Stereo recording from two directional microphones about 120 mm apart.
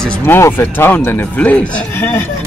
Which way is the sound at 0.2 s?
20° left (ahead or behind).